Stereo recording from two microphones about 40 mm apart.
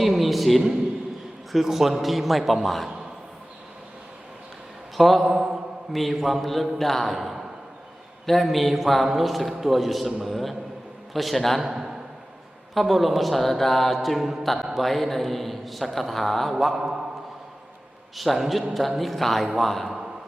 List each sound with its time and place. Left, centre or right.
0.0 s a sound: centre
1.5 s speech: centre
4.9 s mantra: centre
5.2 s mantra: centre
5.9 s speech: centre
11.6 s a man's voice: centre
12.7 s speech: centre
18.2 s a man's voice: centre